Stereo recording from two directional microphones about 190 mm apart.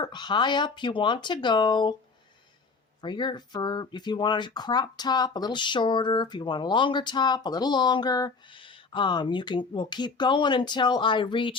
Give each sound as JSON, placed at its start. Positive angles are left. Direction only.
{"t": 0.0, "sound": "speech", "side_deg": 25}
{"t": 3.0, "sound": "speech", "side_deg": 25}